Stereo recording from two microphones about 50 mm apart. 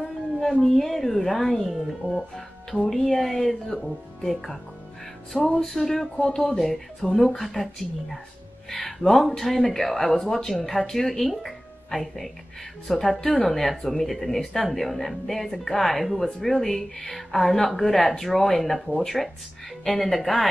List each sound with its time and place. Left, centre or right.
0.4 s speech: centre
5.3 s music: centre
6.1 s music: centre
6.6 s speech: centre
12.8 s music: centre
13.2 s speech: centre